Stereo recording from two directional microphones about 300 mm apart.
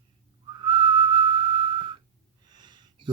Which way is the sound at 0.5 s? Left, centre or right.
Centre.